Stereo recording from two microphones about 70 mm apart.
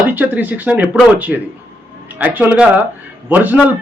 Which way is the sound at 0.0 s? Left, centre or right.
Right.